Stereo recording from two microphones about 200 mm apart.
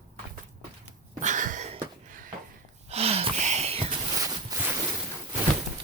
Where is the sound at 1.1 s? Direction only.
40° right (ahead or behind).